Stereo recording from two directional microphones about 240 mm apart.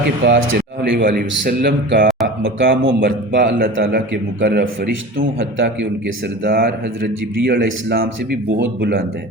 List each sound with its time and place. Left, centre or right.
0.3 s speech: right
0.8 s a man's voice: right